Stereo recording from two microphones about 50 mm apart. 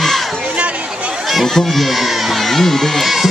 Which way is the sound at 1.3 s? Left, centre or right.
Centre.